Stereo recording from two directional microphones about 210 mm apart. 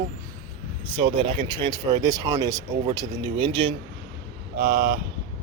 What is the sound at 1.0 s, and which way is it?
Speech, 25° right (ahead or behind).